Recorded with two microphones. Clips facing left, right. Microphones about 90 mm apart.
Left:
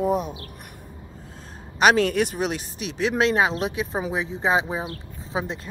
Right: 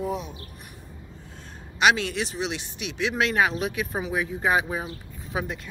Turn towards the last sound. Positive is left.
turn(degrees=25)  # may be behind; listen again after turning